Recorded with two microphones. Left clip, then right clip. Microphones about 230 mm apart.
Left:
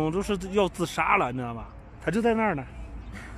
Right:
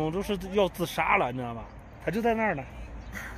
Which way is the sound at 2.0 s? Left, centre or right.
Centre.